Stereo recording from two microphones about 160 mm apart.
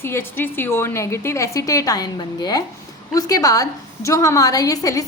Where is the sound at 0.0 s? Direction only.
15° left (ahead or behind).